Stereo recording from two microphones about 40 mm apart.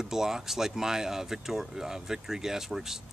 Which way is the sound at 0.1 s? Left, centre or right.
Centre.